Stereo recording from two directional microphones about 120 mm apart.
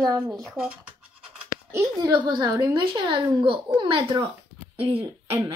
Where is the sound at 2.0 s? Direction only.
40° right (ahead or behind).